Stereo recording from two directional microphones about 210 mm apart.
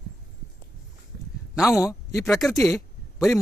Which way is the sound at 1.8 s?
15° left (ahead or behind).